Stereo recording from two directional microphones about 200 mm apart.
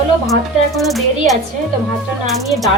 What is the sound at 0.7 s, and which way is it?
Speech, centre (ahead or behind).